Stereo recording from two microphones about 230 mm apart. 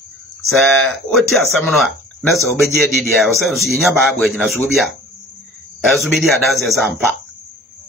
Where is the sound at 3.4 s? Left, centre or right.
Centre.